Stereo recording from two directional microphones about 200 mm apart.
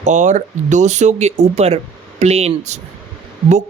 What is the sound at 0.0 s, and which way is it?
Speech, 35° right (ahead or behind).